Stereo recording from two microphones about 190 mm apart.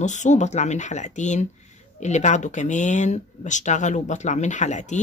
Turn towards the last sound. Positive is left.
turn(degrees=40)  # may be behind; listen again after turning